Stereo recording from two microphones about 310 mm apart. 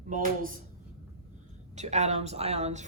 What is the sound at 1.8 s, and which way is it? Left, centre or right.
Speech, right.